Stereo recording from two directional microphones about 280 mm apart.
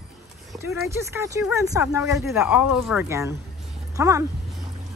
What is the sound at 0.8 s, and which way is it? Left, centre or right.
Speech, centre.